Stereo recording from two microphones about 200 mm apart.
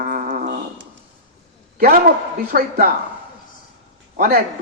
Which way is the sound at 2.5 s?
50° right (ahead or behind).